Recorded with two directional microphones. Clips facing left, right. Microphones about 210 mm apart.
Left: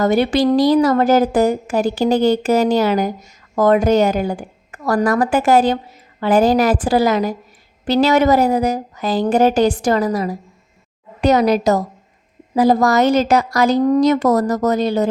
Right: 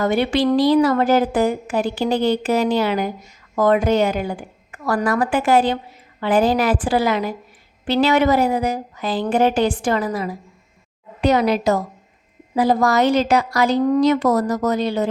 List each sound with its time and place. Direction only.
0.0 s a woman's voice: 40° left (ahead or behind)